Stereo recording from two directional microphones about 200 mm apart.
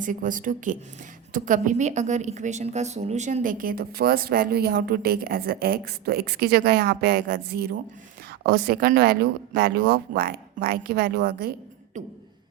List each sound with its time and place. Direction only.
0.0 s a woman's voice: 40° right (ahead or behind)